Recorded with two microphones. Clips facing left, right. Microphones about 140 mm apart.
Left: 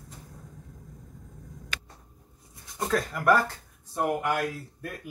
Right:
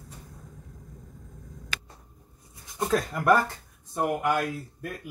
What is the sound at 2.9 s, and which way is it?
Speech, 20° right (ahead or behind).